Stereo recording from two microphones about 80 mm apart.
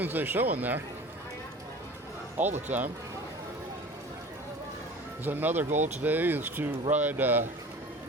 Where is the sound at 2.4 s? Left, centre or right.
Right.